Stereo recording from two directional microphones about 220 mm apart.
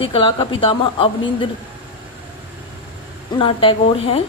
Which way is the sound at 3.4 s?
25° left (ahead or behind).